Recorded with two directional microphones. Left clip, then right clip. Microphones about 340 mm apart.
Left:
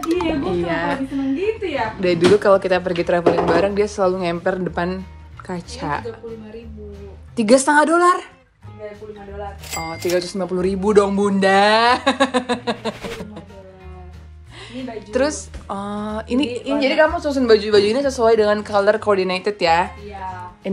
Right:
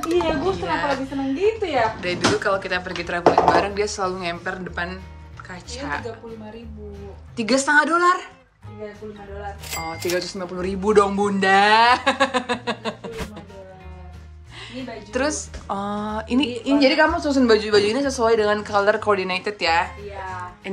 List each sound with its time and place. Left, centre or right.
0.0 s a sound: centre
0.7 s a woman's voice: centre
7.3 s speech: centre
9.7 s speech: centre
14.7 s a woman's voice: centre